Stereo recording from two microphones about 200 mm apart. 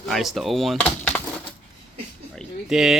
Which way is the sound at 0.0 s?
Centre (ahead or behind).